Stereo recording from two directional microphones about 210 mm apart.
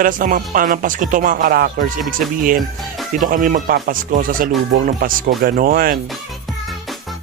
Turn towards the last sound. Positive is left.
turn(degrees=-45)  # may be behind; listen again after turning